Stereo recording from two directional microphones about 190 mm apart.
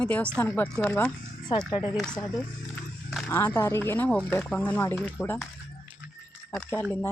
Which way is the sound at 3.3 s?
15° left (ahead or behind).